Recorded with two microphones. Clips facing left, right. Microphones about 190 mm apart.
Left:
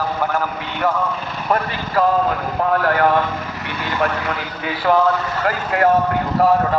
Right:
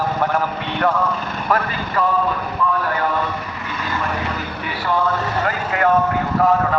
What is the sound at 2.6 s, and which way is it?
Speech, 70° left (ahead or behind).